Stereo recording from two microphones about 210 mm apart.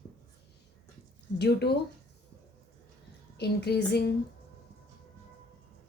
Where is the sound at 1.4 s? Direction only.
50° left (ahead or behind).